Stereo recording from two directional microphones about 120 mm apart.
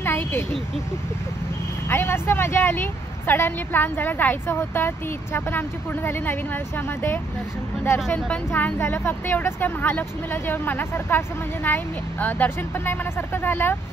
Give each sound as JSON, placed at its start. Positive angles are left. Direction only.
{"t": 0.0, "sound": "vehicle", "side_deg": 20}
{"t": 1.9, "sound": "speech", "side_deg": 20}
{"t": 8.5, "sound": "speech", "side_deg": 20}